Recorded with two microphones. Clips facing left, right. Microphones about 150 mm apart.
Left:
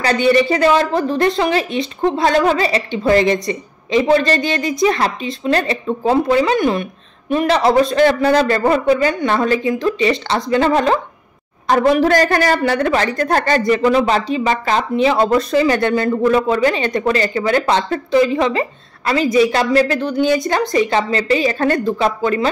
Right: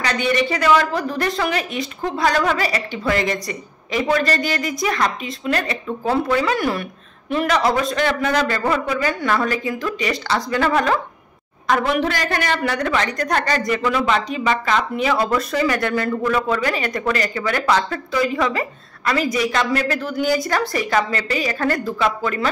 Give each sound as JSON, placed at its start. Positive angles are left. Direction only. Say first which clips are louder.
{"t": 0.0, "sound": "a woman's voice", "louder": "left 6 dB", "side_deg": 30}